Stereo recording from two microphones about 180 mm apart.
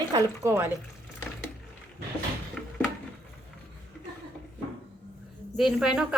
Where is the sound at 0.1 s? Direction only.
15° right (ahead or behind).